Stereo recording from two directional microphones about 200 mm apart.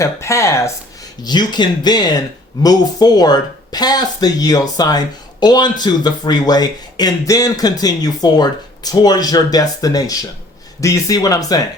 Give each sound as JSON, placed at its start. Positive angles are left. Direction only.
{"t": 0.0, "sound": "speech", "side_deg": 15}